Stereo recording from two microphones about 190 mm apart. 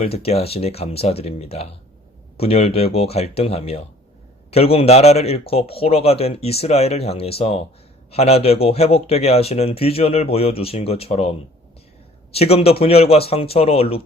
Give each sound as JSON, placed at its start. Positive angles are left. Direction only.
{"t": 0.0, "sound": "speech", "side_deg": 30}